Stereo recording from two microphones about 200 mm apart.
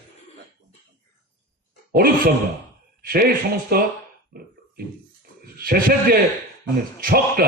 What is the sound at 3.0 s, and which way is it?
Speech, 45° right (ahead or behind).